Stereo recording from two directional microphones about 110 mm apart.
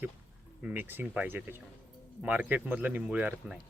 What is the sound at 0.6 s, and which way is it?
Speech, 15° right (ahead or behind).